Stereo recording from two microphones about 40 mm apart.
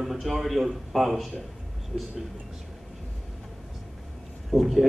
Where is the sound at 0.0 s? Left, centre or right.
Centre.